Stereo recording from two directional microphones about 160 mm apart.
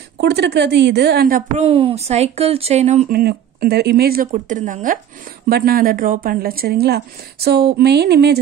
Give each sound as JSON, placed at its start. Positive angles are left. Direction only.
{"t": 0.2, "sound": "a woman's voice", "side_deg": -90}
{"t": 1.6, "sound": "speech", "side_deg": -35}
{"t": 3.1, "sound": "a woman's voice", "side_deg": -70}
{"t": 4.3, "sound": "speech", "side_deg": -55}
{"t": 5.5, "sound": "a woman's voice", "side_deg": -70}